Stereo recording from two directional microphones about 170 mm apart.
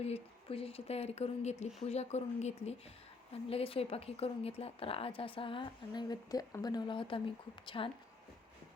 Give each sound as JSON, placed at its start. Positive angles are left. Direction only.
{"t": 0.0, "sound": "a woman's voice", "side_deg": 35}